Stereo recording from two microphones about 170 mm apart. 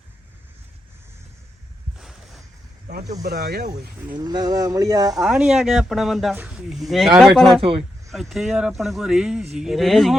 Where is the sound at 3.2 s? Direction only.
70° right (ahead or behind).